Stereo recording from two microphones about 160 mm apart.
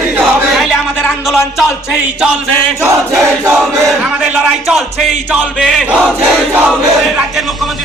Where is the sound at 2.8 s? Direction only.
15° right (ahead or behind).